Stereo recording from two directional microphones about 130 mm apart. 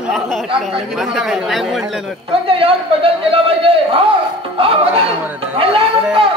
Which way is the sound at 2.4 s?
45° right (ahead or behind).